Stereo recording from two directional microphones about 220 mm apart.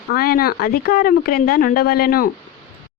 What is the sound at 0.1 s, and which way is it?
A woman's voice, 45° left (ahead or behind).